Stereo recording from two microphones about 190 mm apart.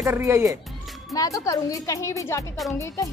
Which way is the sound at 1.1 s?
20° left (ahead or behind).